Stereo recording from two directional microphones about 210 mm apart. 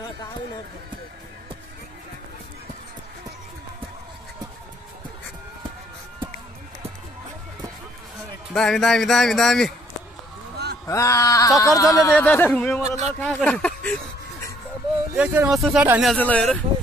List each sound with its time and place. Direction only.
8.5 s speech: centre (ahead or behind)
10.9 s speech: 15° left (ahead or behind)
15.1 s speech: 5° right (ahead or behind)